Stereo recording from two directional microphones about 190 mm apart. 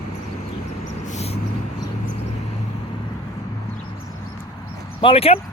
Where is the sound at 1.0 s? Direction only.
35° left (ahead or behind).